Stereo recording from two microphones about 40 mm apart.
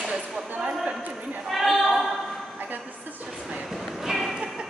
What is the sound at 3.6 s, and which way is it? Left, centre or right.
Music, centre.